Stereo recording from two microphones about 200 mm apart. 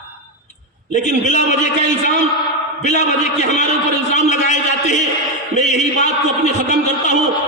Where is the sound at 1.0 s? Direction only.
35° left (ahead or behind).